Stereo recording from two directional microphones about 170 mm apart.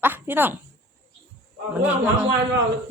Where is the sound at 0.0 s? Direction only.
10° right (ahead or behind).